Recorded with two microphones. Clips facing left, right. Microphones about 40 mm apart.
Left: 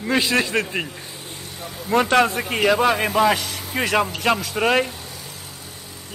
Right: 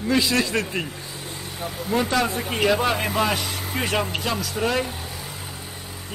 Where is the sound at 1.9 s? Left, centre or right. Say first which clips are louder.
Left 5 dB; left.